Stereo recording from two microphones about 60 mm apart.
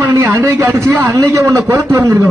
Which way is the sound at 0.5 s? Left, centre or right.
Right.